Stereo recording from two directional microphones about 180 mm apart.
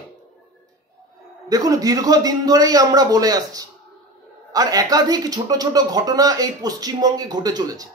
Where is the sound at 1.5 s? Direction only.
20° right (ahead or behind).